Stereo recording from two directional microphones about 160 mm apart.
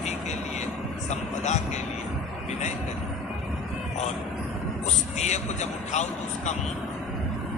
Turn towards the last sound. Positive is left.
turn(degrees=45)  # may be behind; listen again after turning